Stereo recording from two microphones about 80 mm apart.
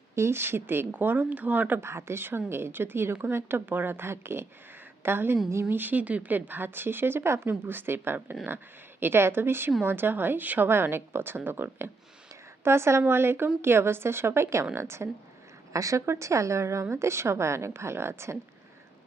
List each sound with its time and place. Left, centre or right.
0.2 s speech: right